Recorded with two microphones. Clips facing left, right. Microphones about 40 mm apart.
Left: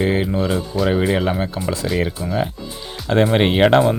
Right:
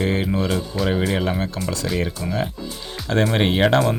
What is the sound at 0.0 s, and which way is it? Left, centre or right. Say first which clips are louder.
Speech: left 3 dB; centre.